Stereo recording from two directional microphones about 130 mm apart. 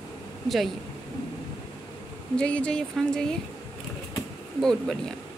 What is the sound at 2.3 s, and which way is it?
A woman's voice, 10° left (ahead or behind).